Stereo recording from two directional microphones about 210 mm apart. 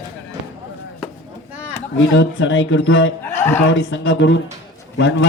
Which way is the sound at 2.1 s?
60° left (ahead or behind).